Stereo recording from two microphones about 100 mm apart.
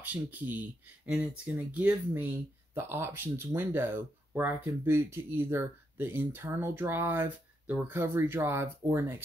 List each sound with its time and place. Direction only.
0.0 s speech: 15° right (ahead or behind)